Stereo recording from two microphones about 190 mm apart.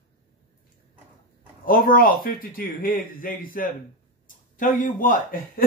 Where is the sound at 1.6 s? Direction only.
50° left (ahead or behind).